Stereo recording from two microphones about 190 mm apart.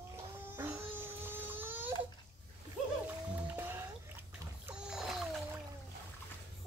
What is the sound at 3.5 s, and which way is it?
Music, 10° right (ahead or behind).